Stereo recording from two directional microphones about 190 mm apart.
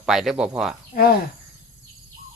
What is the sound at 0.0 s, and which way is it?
Speech, centre (ahead or behind).